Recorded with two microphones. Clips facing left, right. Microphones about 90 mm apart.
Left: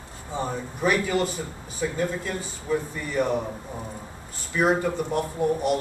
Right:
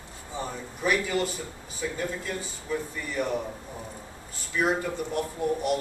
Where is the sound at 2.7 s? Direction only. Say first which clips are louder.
Left 5 dB; 35° left (ahead or behind).